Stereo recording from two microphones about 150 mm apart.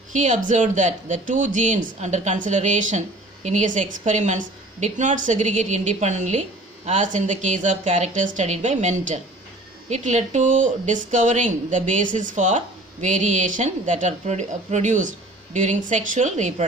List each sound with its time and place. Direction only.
0.1 s a woman's voice: 55° right (ahead or behind)